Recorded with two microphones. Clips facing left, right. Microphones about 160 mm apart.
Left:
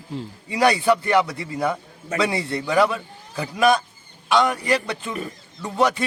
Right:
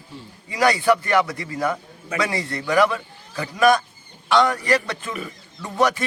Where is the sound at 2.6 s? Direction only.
15° left (ahead or behind).